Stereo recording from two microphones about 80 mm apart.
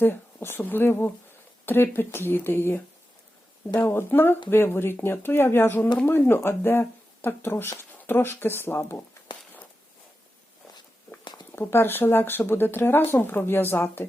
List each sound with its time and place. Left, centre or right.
0.0 s speech: left
11.5 s speech: left